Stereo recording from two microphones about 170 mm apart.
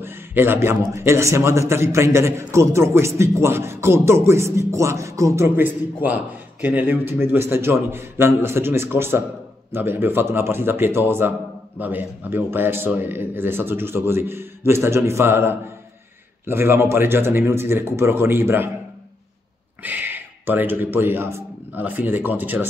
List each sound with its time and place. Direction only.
0.0 s a man's voice: 15° right (ahead or behind)
19.8 s speech: 10° right (ahead or behind)